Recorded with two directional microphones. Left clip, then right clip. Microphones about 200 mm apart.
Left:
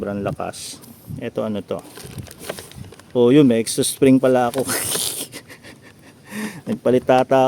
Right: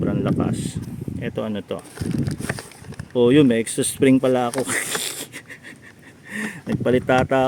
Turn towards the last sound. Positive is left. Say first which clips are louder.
# left 3 dB
turn(degrees=10)  # may be behind; listen again after turning